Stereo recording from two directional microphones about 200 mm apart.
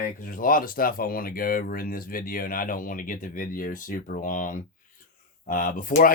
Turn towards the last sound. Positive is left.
turn(degrees=40)  # may be behind; listen again after turning